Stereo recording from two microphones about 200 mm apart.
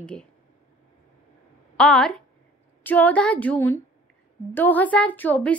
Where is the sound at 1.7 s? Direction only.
5° left (ahead or behind).